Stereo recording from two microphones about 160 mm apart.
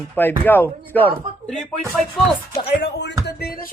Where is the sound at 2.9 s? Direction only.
90° left; by 3.7 s 75° left (ahead or behind).